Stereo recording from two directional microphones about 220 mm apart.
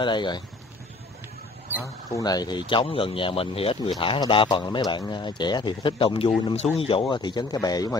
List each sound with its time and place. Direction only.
0.0 s speech: 20° left (ahead or behind)
2.1 s speech: 15° left (ahead or behind)